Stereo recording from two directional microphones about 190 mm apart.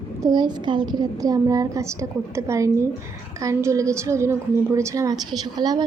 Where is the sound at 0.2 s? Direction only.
20° right (ahead or behind).